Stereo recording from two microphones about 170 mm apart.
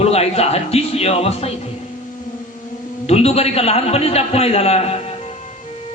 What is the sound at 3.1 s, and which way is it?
Speech, 35° left (ahead or behind).